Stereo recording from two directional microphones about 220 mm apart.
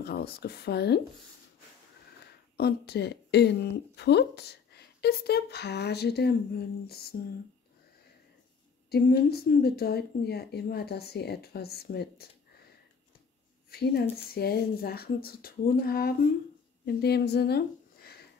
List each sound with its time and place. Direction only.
0.0 s a woman's voice: 45° left (ahead or behind)
2.5 s a woman's voice: 45° left (ahead or behind)
8.9 s a woman's voice: 45° left (ahead or behind)
13.7 s a woman's voice: 45° left (ahead or behind)